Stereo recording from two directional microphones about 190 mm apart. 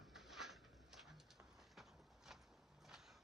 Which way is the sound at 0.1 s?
Centre (ahead or behind).